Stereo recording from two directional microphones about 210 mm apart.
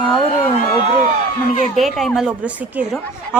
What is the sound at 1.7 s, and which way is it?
A woman's voice, centre (ahead or behind).